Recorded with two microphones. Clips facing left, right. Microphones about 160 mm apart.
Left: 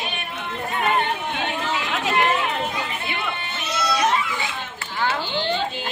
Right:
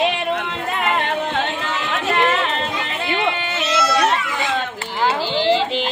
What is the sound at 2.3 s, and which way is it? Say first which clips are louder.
Chatter: right 2 dB; 85° right.